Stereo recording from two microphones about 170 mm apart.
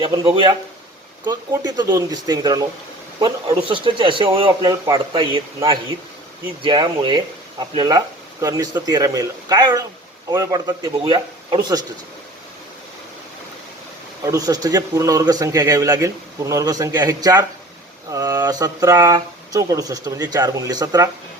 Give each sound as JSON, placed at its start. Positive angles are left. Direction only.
{"t": 0.0, "sound": "speech", "side_deg": -30}
{"t": 6.6, "sound": "speech", "side_deg": -25}
{"t": 14.3, "sound": "speech", "side_deg": -20}